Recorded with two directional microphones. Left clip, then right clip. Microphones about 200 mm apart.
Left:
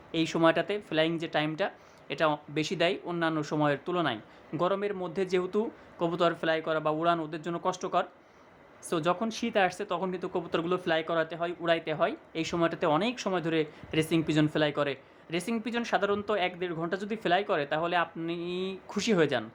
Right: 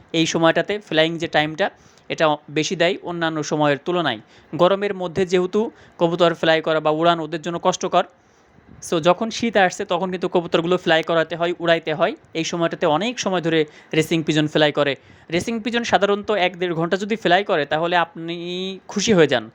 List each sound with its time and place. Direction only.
0.1 s speech: 25° right (ahead or behind)